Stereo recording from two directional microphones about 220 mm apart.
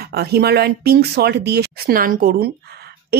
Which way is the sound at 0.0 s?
45° right (ahead or behind).